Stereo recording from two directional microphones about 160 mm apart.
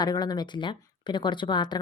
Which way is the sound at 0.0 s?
25° left (ahead or behind).